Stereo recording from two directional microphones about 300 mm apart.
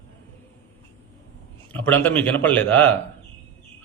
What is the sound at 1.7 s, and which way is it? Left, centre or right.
A man's voice, centre.